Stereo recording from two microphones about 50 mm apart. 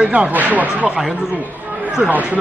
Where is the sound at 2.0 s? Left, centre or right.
Right.